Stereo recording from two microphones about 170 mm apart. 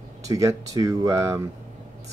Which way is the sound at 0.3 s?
20° right (ahead or behind).